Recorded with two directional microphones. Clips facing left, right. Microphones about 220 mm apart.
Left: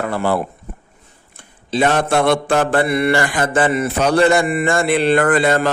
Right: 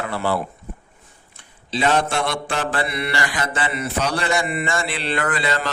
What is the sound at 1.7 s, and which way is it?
Mantra, 50° left (ahead or behind).